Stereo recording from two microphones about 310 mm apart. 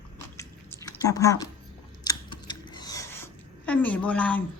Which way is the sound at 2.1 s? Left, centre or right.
Centre.